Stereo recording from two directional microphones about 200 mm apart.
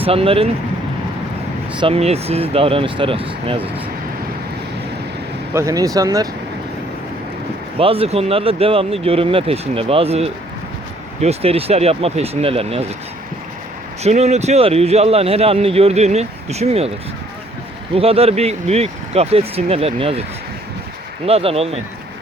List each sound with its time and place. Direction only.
0.0 s speech: 30° right (ahead or behind)
1.8 s speech: 30° right (ahead or behind)
5.5 s speech: 15° right (ahead or behind)
7.8 s speech: 30° right (ahead or behind)
14.0 s speech: 35° right (ahead or behind)
17.9 s speech: 30° right (ahead or behind)
21.2 s speech: 30° right (ahead or behind)